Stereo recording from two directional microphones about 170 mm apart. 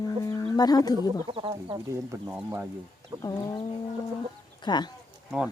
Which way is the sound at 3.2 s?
25° left (ahead or behind).